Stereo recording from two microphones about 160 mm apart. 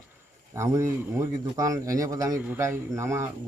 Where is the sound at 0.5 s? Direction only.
15° right (ahead or behind).